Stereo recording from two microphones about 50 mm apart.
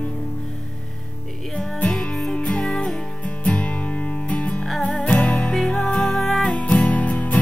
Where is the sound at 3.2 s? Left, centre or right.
Left.